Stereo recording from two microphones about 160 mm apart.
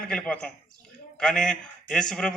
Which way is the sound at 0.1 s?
5° left (ahead or behind).